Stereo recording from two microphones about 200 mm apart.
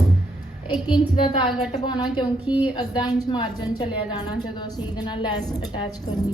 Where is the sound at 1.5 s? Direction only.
Centre (ahead or behind).